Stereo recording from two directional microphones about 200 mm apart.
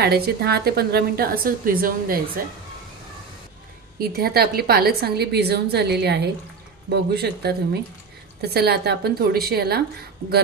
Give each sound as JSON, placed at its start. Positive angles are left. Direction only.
{"t": 0.0, "sound": "a woman's voice", "side_deg": -50}
{"t": 4.0, "sound": "a woman's voice", "side_deg": -50}